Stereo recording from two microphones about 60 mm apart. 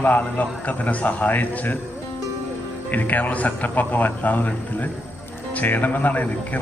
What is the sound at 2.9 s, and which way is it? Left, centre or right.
A man's voice, left.